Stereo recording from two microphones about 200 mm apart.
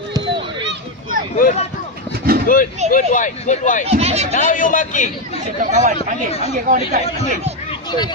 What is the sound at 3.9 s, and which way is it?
Speech, 30° right (ahead or behind).